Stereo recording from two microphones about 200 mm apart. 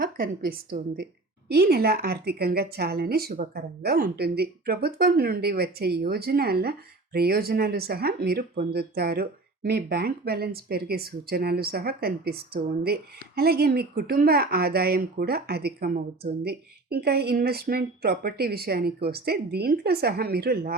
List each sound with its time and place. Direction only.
0.0 s a woman's voice: 45° right (ahead or behind)